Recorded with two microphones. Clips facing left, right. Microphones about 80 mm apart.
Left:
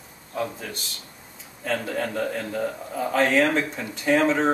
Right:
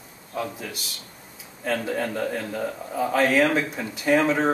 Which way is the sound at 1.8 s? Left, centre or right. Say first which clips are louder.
Even; centre.